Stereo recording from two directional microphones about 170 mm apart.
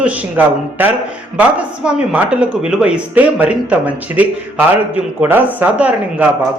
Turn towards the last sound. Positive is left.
turn(degrees=-10)  # may be behind; listen again after turning